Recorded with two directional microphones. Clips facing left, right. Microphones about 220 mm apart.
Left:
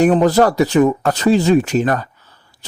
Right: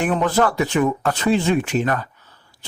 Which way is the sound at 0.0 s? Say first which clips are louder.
Left 7 dB; 35° left (ahead or behind).